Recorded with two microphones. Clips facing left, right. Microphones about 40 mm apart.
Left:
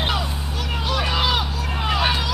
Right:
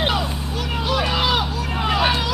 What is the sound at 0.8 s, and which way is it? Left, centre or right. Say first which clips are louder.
Vehicle: right 1 dB; centre.